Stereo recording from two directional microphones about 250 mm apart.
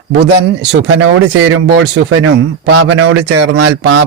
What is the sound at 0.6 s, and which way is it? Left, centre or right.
Speech, right.